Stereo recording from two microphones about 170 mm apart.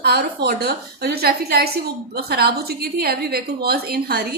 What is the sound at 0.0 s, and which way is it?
A woman's voice, 70° right (ahead or behind).